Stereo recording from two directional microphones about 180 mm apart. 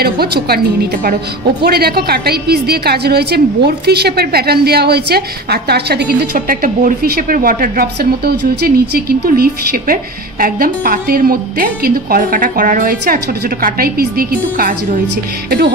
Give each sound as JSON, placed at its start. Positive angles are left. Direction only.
{"t": 0.0, "sound": "a woman's voice", "side_deg": -60}
{"t": 1.6, "sound": "a woman's voice", "side_deg": -60}